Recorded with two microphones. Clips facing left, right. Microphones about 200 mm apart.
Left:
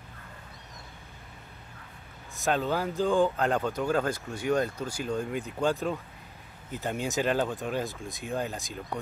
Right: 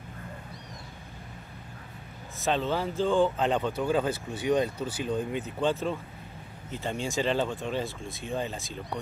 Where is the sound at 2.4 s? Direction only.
5° left (ahead or behind).